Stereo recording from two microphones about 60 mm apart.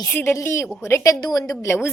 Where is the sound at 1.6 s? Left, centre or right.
Left.